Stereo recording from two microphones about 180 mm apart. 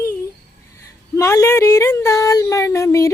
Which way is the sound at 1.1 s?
15° left (ahead or behind).